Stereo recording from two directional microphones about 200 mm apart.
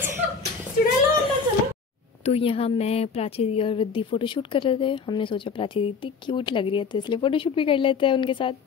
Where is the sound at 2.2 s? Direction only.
30° left (ahead or behind).